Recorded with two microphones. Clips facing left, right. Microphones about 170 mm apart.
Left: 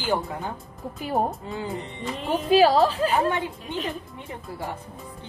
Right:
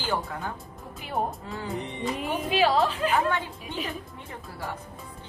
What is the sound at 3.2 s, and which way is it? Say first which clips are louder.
Speech: left 3 dB; 20° left (ahead or behind).